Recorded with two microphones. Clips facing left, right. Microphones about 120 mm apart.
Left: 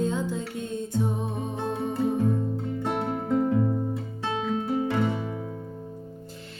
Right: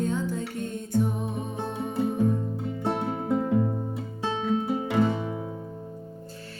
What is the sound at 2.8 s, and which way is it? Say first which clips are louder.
Music: right 2 dB; 5° right (ahead or behind).